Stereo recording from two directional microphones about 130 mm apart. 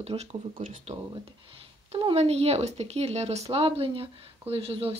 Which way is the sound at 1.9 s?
45° right (ahead or behind).